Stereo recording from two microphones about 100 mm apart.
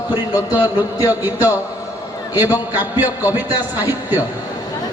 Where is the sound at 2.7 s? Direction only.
20° right (ahead or behind).